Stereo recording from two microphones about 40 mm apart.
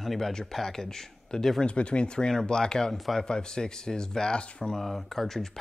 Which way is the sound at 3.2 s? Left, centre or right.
Centre.